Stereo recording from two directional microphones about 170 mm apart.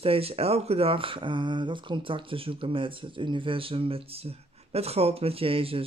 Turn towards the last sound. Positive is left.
turn(degrees=-35)  # may be behind; listen again after turning